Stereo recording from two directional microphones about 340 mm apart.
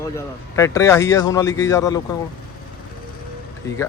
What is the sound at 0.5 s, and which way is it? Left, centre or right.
Speech, centre.